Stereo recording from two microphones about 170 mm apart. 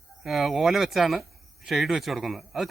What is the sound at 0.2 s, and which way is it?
Speech, centre (ahead or behind).